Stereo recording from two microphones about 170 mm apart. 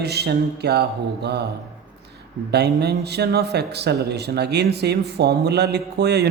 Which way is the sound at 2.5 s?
75° right (ahead or behind).